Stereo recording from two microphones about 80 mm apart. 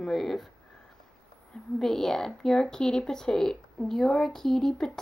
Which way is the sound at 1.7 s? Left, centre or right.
Centre.